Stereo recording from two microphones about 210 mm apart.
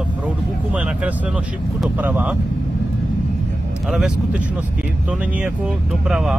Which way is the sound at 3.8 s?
Centre (ahead or behind).